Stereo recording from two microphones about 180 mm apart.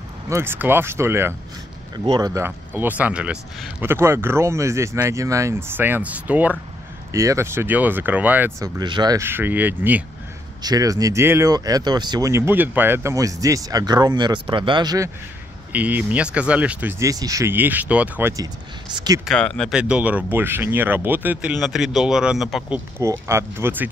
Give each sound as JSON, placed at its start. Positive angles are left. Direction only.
{"t": 0.3, "sound": "speech", "side_deg": -15}
{"t": 10.6, "sound": "speech", "side_deg": -20}
{"t": 15.7, "sound": "speech", "side_deg": -10}
{"t": 19.2, "sound": "speech", "side_deg": 5}
{"t": 22.9, "sound": "speech", "side_deg": -15}